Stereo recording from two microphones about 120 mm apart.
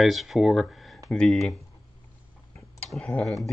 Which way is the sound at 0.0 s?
Centre (ahead or behind).